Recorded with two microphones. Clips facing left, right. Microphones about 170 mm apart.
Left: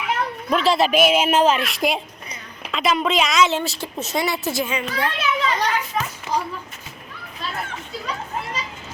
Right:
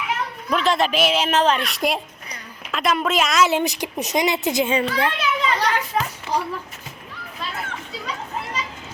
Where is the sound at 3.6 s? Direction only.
15° right (ahead or behind).